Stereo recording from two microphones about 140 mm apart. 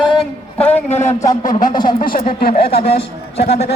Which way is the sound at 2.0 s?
90° left.